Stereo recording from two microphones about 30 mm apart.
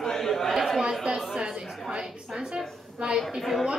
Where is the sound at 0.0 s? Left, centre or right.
Centre.